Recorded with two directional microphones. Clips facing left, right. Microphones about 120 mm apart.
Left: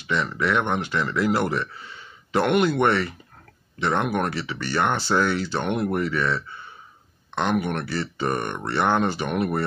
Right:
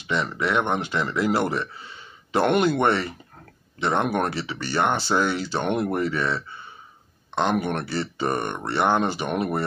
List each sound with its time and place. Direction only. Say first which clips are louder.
0.0 s speech: left 1 dB; 25° right (ahead or behind)